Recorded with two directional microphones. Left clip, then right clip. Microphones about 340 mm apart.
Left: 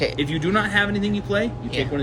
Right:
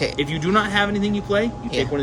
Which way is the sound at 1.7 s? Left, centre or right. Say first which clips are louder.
Right 3 dB; centre.